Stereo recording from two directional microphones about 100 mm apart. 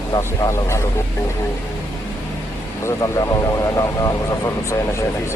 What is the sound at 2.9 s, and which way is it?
Speech, 35° left (ahead or behind).